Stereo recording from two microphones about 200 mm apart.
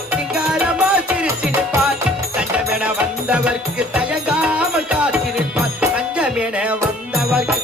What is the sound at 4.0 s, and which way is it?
Music, 5° right (ahead or behind).